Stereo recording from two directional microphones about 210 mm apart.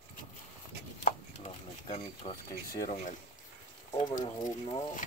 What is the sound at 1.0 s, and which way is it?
Chopping, 35° left (ahead or behind).